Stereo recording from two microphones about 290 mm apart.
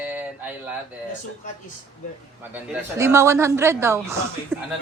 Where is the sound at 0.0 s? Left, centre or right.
Centre.